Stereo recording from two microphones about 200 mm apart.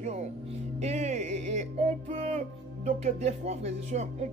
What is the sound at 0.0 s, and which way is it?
Speech, 35° right (ahead or behind).